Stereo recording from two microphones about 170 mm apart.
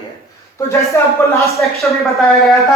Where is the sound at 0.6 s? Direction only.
15° left (ahead or behind).